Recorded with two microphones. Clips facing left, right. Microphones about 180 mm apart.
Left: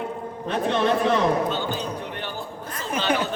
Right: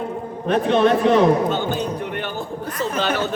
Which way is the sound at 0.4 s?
65° right (ahead or behind).